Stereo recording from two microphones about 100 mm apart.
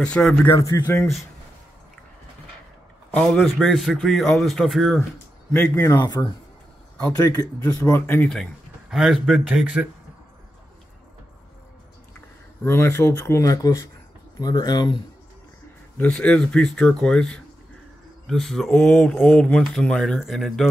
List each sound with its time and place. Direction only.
0.0 s speech: 10° left (ahead or behind)
0.5 s speech: 30° left (ahead or behind)
3.3 s a man's voice: centre (ahead or behind)
5.8 s speech: 25° left (ahead or behind)
6.0 s speech: 45° left (ahead or behind)
7.1 s speech: 35° left (ahead or behind)
7.8 s speech: 25° left (ahead or behind)
8.9 s a man's voice: 5° right (ahead or behind)
12.6 s speech: 25° left (ahead or behind)
13.4 s speech: 35° left (ahead or behind)
16.0 s a man's voice: 10° left (ahead or behind)